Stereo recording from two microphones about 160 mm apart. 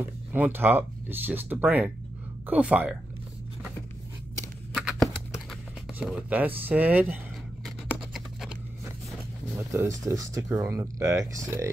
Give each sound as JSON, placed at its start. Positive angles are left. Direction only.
{"t": 0.3, "sound": "speech", "side_deg": -10}
{"t": 4.7, "sound": "typing", "side_deg": -5}
{"t": 5.9, "sound": "speech", "side_deg": -10}
{"t": 8.1, "sound": "a sound", "side_deg": 0}
{"t": 9.7, "sound": "speech", "side_deg": -20}